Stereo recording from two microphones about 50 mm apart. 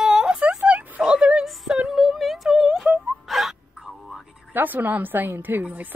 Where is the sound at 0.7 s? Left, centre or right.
Right.